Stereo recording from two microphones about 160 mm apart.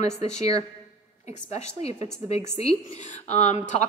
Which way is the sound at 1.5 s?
40° left (ahead or behind).